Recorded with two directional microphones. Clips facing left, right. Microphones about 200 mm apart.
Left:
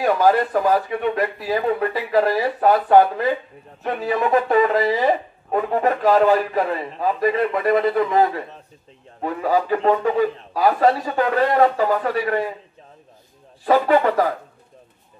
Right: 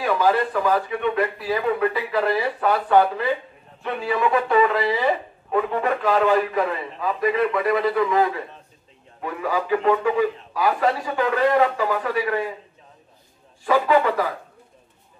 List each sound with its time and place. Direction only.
0.0 s a man's voice: 45° left (ahead or behind)
13.7 s speech: 45° left (ahead or behind)